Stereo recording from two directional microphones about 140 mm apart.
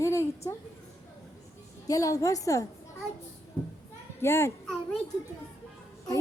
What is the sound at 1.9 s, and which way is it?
Speech, 25° left (ahead or behind).